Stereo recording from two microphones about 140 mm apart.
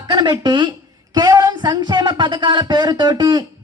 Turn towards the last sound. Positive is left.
turn(degrees=-30)  # may be behind; listen again after turning